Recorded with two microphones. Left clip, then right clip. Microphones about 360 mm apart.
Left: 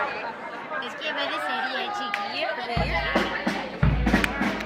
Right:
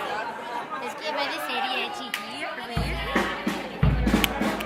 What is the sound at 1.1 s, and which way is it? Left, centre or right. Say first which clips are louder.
Chatter: left 1 dB; centre.